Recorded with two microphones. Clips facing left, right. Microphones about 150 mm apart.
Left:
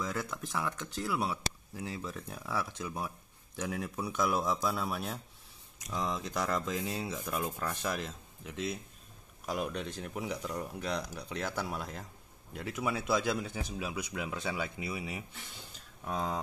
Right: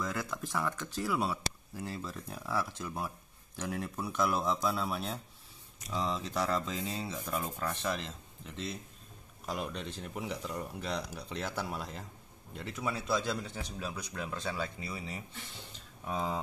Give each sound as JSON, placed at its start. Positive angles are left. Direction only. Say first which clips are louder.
{"t": 0.0, "sound": "speech", "louder": "even", "side_deg": 0}
{"t": 6.3, "sound": "speech", "louder": "even", "side_deg": 0}
{"t": 16.0, "sound": "speech", "louder": "even", "side_deg": 0}